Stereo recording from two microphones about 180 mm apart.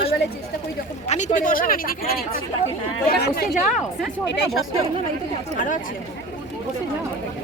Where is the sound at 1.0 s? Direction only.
40° left (ahead or behind); by 3.5 s 65° left (ahead or behind).